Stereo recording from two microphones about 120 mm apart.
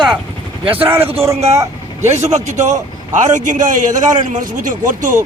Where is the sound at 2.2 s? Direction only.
75° right (ahead or behind).